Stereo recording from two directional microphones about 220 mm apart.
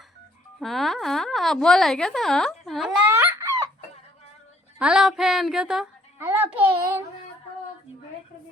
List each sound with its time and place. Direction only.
0.6 s speech: centre (ahead or behind)
4.8 s speech: 5° right (ahead or behind)
6.5 s a child's voice: 25° right (ahead or behind)